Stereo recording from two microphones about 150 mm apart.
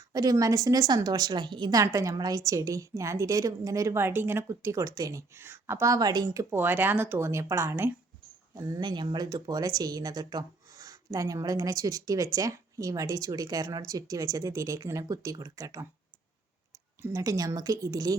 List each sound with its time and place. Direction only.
0.1 s speech: 25° right (ahead or behind)
17.0 s speech: 20° right (ahead or behind)